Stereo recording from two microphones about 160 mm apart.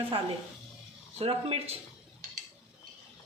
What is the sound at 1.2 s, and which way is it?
Speech, 40° right (ahead or behind).